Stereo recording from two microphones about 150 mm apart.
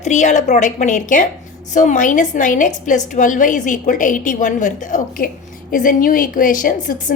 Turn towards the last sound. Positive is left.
turn(degrees=60)  # may be behind; listen again after turning